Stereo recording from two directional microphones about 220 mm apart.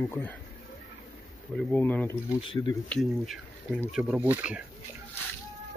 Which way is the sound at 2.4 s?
20° left (ahead or behind).